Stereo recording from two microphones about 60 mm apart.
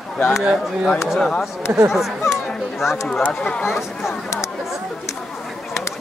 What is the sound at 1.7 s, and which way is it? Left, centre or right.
Speech, right.